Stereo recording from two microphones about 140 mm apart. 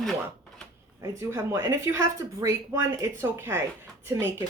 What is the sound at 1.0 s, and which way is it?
Speech, 20° right (ahead or behind).